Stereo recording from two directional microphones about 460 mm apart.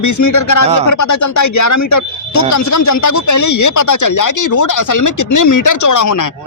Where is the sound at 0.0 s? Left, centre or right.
Left.